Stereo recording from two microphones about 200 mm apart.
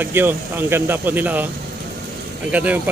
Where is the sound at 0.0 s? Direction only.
10° right (ahead or behind).